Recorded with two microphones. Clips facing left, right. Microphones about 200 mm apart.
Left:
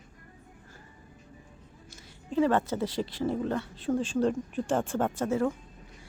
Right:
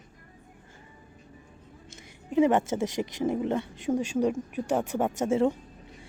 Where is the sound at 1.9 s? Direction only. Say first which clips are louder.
Right 3 dB; 15° right (ahead or behind).